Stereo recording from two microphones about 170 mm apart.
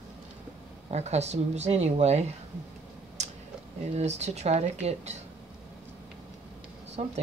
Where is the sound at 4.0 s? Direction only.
40° right (ahead or behind).